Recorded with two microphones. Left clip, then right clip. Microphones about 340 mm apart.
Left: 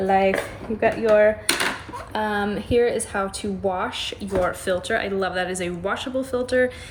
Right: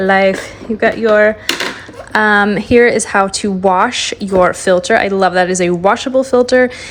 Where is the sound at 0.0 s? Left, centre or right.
Right.